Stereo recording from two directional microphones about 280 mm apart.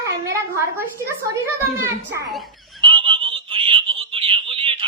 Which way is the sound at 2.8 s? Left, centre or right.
Centre.